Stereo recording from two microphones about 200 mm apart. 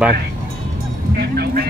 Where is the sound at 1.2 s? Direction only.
50° right (ahead or behind).